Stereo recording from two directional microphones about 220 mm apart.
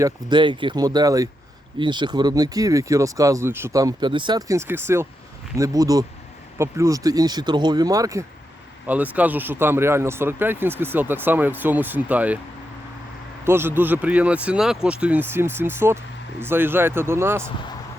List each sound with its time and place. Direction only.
0.0 s speech: 20° right (ahead or behind)
13.4 s speech: 10° right (ahead or behind)